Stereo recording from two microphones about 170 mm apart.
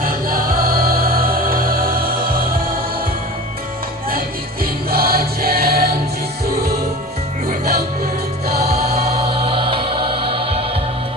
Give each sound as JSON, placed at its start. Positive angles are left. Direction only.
{"t": 0.0, "sound": "music", "side_deg": -60}
{"t": 4.6, "sound": "music", "side_deg": -60}
{"t": 7.6, "sound": "music", "side_deg": -65}
{"t": 9.3, "sound": "music", "side_deg": -30}